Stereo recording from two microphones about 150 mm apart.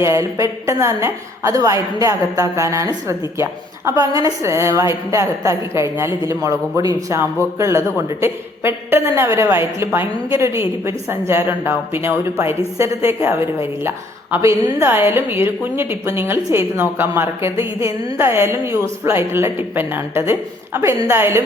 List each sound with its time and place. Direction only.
0.0 s a woman's voice: 20° right (ahead or behind)